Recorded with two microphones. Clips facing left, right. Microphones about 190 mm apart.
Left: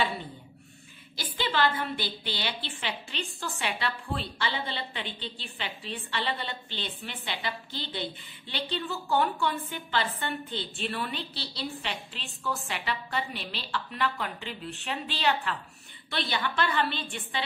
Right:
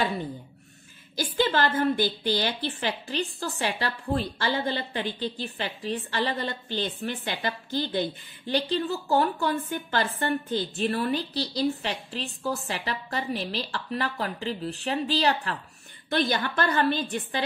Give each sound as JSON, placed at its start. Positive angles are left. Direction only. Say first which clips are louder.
{"t": 1.1, "sound": "a woman's voice", "louder": "right 5 dB", "side_deg": -45}